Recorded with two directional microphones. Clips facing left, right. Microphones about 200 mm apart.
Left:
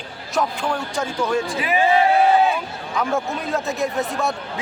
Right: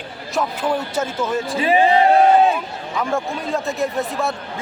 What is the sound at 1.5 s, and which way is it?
Speech, 30° right (ahead or behind).